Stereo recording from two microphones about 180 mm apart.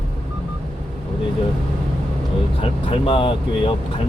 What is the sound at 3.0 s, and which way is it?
Speech, 30° left (ahead or behind).